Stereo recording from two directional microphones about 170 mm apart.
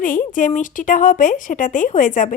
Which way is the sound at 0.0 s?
55° left (ahead or behind).